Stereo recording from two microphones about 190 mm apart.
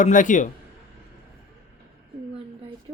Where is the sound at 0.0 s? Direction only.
40° left (ahead or behind).